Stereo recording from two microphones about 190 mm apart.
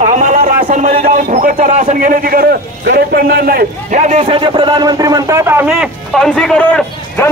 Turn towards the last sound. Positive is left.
turn(degrees=5)  # may be behind; listen again after turning